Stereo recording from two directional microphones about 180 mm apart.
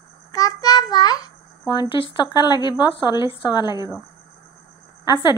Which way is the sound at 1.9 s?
25° left (ahead or behind).